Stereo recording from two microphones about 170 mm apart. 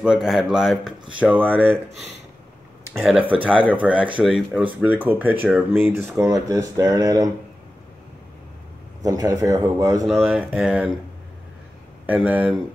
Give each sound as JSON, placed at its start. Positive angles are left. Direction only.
{"t": 0.0, "sound": "speech", "side_deg": -5}
{"t": 2.9, "sound": "speech", "side_deg": 0}
{"t": 9.0, "sound": "a man's voice", "side_deg": -20}
{"t": 10.0, "sound": "speech", "side_deg": 0}
{"t": 12.3, "sound": "speech", "side_deg": -10}